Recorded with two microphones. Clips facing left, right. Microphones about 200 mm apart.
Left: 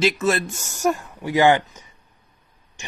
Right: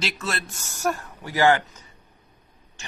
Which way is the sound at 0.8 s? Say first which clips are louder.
Left 5 dB; 15° left (ahead or behind).